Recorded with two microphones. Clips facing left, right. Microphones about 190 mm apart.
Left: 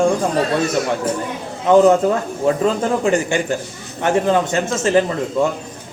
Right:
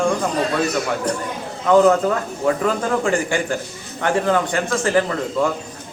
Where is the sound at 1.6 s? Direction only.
20° left (ahead or behind).